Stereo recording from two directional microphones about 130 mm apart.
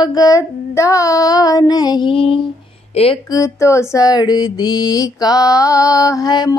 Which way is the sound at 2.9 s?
45° left (ahead or behind).